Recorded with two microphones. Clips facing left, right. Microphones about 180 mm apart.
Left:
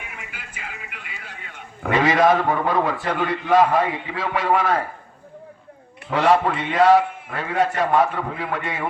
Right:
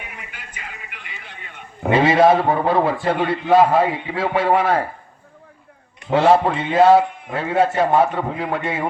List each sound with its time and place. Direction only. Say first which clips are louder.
0.0 s a sound: right 1 dB; 5° left (ahead or behind)
1.8 s a man's voice: right 4 dB; 30° right (ahead or behind)
6.1 s a man's voice: right 3 dB; 30° right (ahead or behind)